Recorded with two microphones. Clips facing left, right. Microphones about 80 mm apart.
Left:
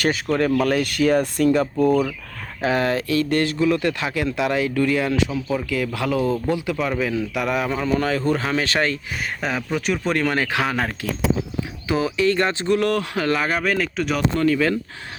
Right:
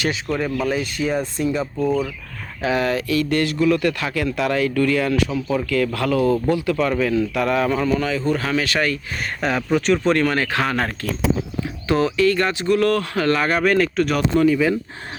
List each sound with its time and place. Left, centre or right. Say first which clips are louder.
0.3 s speech: left 3 dB; centre
0.6 s speech: left 3 dB; left
1.8 s a man's voice: left 2 dB; centre
2.6 s speech: even; left
5.3 s speech: right 2 dB; centre
5.7 s a man's voice: right 4 dB; centre
7.9 s speech: left 1 dB; left
8.3 s speech: even; left
9.4 s a man's voice: right 6 dB; centre
12.1 s speech: right 1 dB; left
12.8 s speech: right 2 dB; centre
14.4 s speech: right 1 dB; centre